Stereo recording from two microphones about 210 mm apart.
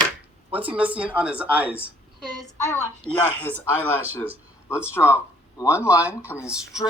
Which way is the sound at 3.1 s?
10° left (ahead or behind).